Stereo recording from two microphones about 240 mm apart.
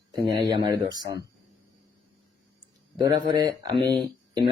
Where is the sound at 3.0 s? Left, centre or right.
Centre.